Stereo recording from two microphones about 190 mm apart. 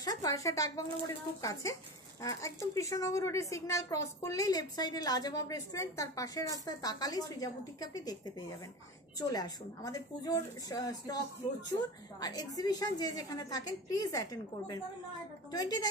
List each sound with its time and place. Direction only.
0.0 s a woman's voice: 20° left (ahead or behind)
12.2 s a woman's voice: 20° left (ahead or behind)